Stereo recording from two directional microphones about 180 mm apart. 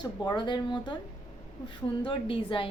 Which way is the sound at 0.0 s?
25° left (ahead or behind).